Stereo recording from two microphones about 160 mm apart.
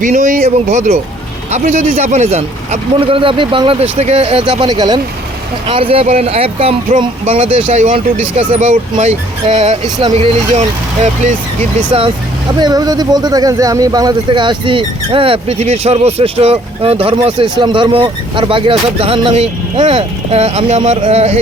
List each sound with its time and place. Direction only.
0.0 s speech: 50° right (ahead or behind)
3.0 s speech: 35° right (ahead or behind)
12.5 s speech: 25° right (ahead or behind); by 21.3 s 40° right (ahead or behind)